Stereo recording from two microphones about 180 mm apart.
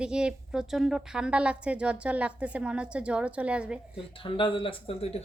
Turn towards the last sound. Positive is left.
turn(degrees=35)  # may be behind; listen again after turning